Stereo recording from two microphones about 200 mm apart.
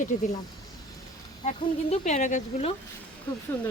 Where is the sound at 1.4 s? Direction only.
35° left (ahead or behind).